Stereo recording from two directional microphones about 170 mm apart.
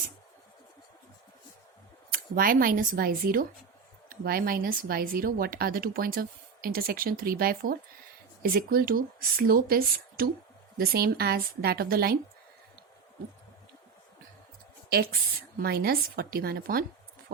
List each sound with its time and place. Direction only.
2.1 s speech: 55° right (ahead or behind)
14.8 s speech: 65° right (ahead or behind)